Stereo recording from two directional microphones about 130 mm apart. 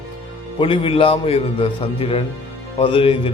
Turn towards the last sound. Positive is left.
turn(degrees=40)  # may be behind; listen again after turning